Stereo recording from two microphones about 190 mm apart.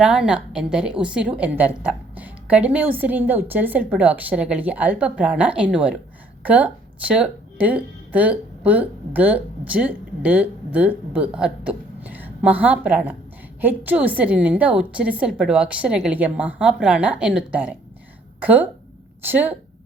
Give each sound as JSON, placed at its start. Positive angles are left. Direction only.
{"t": 0.0, "sound": "a woman's voice", "side_deg": -5}